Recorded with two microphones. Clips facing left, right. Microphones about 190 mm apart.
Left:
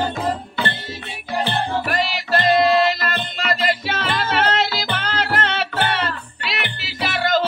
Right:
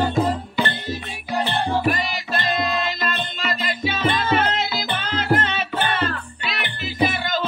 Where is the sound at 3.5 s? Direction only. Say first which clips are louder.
Left 5 dB; 75° left (ahead or behind).